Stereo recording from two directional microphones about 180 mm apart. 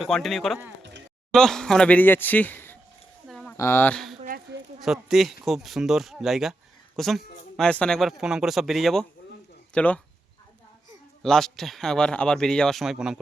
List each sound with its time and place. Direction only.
0.0 s speech: centre (ahead or behind)
0.8 s a sound: 75° right (ahead or behind)
1.3 s speech: 5° left (ahead or behind)
3.2 s a sound: 5° left (ahead or behind)
3.6 s speech: 15° left (ahead or behind)
11.2 s speech: centre (ahead or behind)